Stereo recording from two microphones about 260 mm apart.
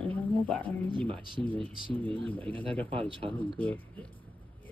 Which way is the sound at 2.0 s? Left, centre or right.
Centre.